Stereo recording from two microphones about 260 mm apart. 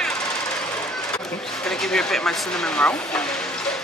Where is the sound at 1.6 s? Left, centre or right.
Centre.